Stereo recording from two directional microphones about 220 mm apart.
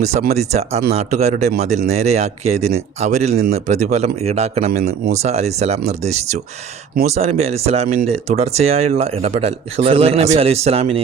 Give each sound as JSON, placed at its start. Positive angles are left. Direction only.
{"t": 0.0, "sound": "speech", "side_deg": -30}